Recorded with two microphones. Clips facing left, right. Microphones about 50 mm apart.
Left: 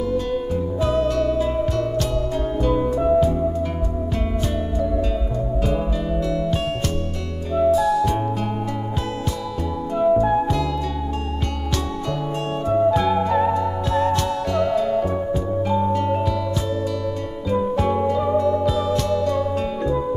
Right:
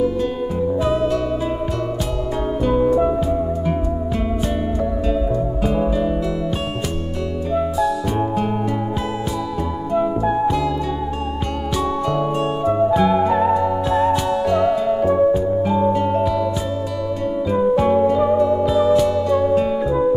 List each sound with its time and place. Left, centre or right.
0.7 s music: centre
2.6 s music: centre
10.1 s music: centre
12.6 s music: centre
17.5 s music: centre